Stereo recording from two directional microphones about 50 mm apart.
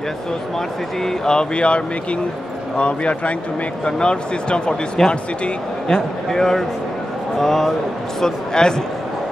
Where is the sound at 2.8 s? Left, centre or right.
Left.